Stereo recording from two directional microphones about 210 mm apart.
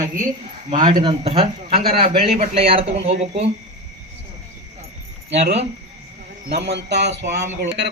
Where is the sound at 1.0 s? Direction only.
25° right (ahead or behind).